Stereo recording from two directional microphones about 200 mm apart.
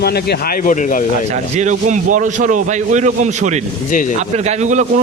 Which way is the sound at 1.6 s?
35° right (ahead or behind).